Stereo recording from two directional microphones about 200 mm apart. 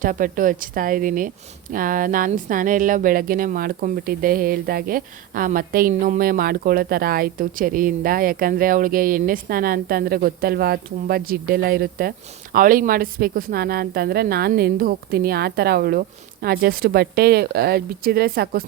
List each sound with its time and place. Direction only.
0.0 s speech: 40° right (ahead or behind)